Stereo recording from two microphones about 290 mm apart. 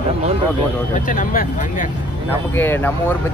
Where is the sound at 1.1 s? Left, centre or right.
Left.